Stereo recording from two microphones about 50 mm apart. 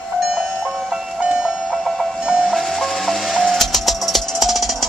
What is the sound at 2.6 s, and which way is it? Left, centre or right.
Music, centre.